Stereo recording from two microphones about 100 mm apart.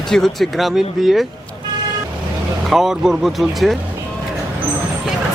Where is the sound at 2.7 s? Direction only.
5° right (ahead or behind).